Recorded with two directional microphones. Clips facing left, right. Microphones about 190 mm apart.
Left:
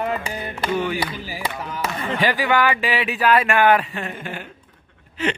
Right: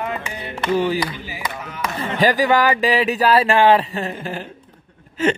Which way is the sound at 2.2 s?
40° right (ahead or behind).